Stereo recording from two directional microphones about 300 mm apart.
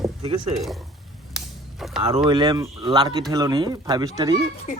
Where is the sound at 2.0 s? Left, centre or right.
Centre.